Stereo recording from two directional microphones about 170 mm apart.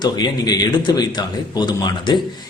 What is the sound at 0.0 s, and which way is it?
Speech, 25° left (ahead or behind).